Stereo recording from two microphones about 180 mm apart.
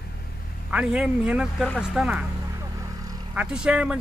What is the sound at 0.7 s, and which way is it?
A man's voice, 5° right (ahead or behind).